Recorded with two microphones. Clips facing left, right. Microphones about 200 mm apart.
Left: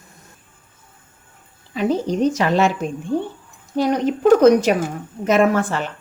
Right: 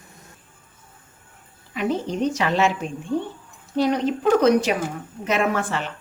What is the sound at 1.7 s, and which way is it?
Speech, 35° left (ahead or behind).